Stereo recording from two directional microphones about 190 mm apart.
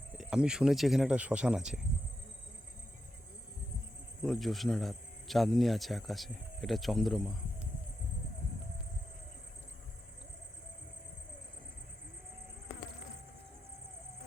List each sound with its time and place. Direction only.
0.2 s speech: 5° right (ahead or behind)
4.2 s speech: centre (ahead or behind)